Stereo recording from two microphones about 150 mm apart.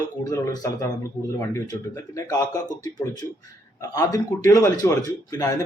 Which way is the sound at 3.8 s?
20° left (ahead or behind).